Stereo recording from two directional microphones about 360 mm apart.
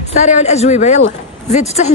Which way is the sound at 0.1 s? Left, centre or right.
Centre.